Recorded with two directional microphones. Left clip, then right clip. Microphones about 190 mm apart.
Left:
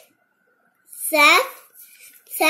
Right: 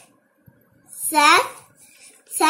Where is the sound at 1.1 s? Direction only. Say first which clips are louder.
Even; 20° right (ahead or behind).